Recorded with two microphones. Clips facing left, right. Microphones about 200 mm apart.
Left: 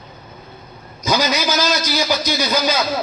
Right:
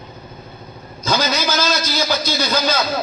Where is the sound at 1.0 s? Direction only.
15° left (ahead or behind).